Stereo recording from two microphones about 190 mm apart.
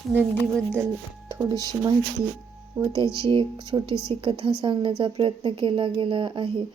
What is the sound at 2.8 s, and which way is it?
Speech, 20° right (ahead or behind).